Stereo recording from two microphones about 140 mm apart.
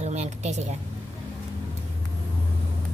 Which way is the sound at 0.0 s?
55° right (ahead or behind).